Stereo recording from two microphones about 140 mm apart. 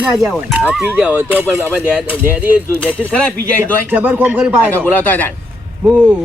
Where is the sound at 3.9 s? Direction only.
10° right (ahead or behind).